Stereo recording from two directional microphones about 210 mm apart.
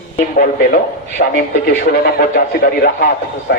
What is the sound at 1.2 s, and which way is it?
Speech, 45° left (ahead or behind).